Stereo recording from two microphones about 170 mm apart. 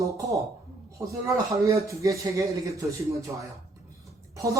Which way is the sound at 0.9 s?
15° right (ahead or behind).